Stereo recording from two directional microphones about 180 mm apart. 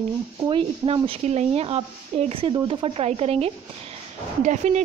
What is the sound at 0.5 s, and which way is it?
A woman's voice, 30° right (ahead or behind).